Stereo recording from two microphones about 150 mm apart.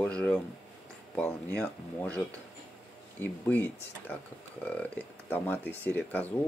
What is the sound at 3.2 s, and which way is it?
Speech, 10° left (ahead or behind).